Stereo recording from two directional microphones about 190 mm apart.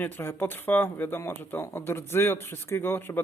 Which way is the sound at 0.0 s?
10° left (ahead or behind).